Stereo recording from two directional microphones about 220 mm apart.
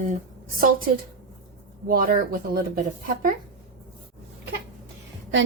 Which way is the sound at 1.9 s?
40° right (ahead or behind).